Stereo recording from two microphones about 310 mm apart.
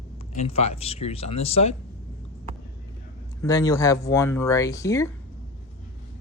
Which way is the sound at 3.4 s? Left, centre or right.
Centre.